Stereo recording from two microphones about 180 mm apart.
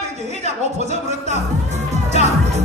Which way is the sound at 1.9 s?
40° right (ahead or behind).